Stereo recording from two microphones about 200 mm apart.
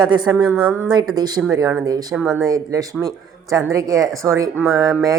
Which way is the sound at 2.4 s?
20° right (ahead or behind).